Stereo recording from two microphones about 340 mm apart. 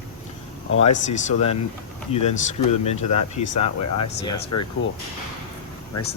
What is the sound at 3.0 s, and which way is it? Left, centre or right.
Speech, centre.